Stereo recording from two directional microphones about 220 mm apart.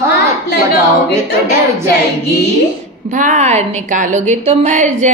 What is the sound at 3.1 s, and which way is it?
A woman's voice, 35° right (ahead or behind).